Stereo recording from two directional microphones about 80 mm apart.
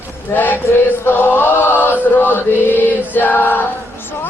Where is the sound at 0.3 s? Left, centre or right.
Left.